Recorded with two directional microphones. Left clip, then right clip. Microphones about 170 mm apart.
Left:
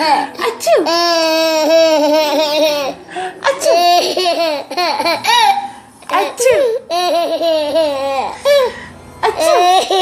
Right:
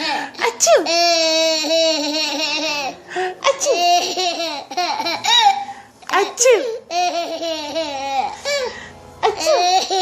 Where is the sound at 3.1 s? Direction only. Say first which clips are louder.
Even; 40° right (ahead or behind).